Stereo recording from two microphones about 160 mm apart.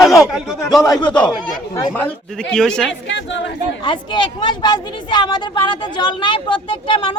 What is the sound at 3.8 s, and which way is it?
A woman's voice, 30° left (ahead or behind).